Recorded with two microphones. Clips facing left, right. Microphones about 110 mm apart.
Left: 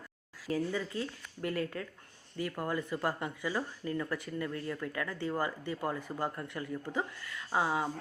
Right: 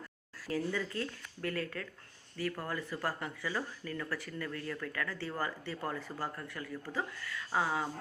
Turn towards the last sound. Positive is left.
turn(degrees=20)  # may be behind; listen again after turning